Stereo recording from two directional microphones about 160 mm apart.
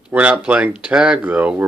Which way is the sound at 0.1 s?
10° right (ahead or behind).